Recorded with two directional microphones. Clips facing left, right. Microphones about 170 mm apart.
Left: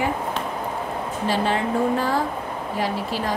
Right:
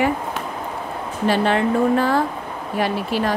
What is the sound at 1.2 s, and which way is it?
Speech, 65° right (ahead or behind).